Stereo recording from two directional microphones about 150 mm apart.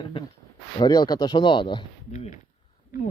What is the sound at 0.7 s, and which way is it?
Speech, 25° left (ahead or behind).